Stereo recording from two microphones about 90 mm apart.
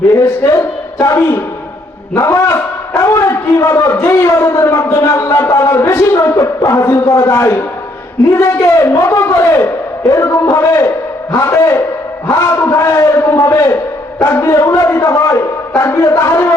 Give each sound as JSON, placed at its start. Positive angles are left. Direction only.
{"t": 0.1, "sound": "a man's voice", "side_deg": 35}